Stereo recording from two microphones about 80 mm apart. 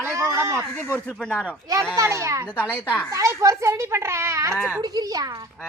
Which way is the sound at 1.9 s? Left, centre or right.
Right.